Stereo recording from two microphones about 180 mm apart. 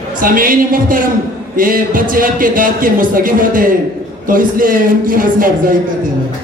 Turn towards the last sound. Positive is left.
turn(degrees=-50)  # may be behind; listen again after turning